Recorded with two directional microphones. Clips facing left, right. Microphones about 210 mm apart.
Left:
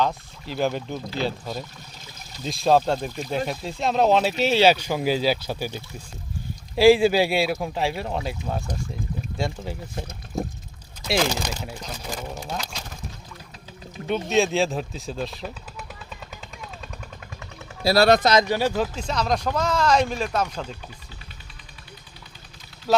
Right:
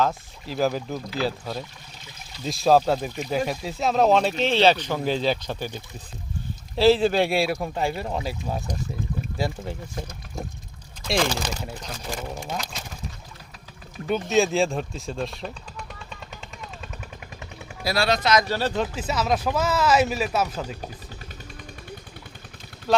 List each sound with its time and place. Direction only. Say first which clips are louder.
0.0 s speech: even; centre (ahead or behind)
11.0 s speech: left 1 dB; 5° left (ahead or behind)
14.1 s speech: even; centre (ahead or behind)
17.8 s speech: left 7 dB; 40° left (ahead or behind)
18.4 s speech: left 3 dB; 15° left (ahead or behind)
18.8 s speech: even; 5° right (ahead or behind)
22.9 s vehicle: left 1 dB; 5° left (ahead or behind)